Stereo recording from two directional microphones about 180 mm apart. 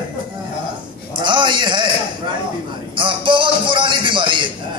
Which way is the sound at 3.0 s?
30° right (ahead or behind).